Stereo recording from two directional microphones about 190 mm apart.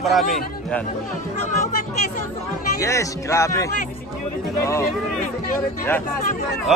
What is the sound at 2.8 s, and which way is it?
Speech, 15° left (ahead or behind).